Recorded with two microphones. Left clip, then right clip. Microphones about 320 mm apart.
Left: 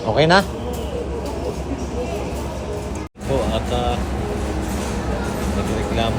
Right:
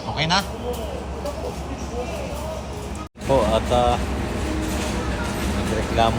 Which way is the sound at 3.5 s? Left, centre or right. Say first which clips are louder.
Right 3 dB; centre.